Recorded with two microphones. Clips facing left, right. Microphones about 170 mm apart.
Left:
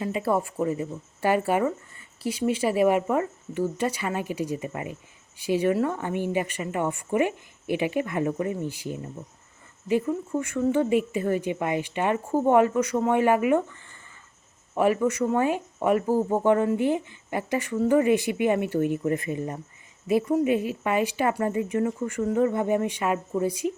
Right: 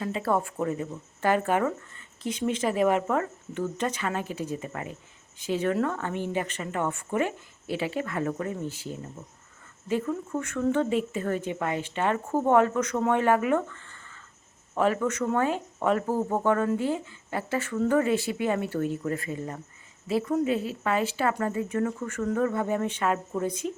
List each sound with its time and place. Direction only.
0.0 s speech: 10° left (ahead or behind)